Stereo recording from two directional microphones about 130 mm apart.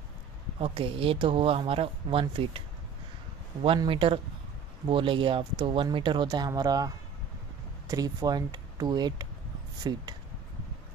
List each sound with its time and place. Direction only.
0.6 s speech: 45° right (ahead or behind)
3.6 s speech: 40° right (ahead or behind)
7.9 s speech: 30° right (ahead or behind)